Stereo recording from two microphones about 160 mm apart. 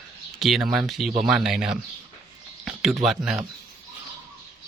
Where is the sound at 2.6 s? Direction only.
Centre (ahead or behind).